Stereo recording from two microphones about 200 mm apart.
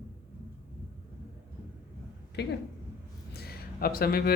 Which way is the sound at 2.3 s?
55° left (ahead or behind).